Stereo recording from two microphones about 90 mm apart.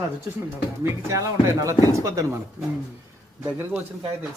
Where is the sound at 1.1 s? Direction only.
35° right (ahead or behind).